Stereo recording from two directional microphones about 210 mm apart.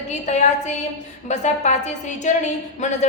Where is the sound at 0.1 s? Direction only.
35° left (ahead or behind).